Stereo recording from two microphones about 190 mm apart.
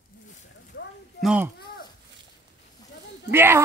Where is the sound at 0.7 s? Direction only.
75° left (ahead or behind).